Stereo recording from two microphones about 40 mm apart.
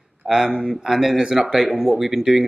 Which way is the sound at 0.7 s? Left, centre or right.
Centre.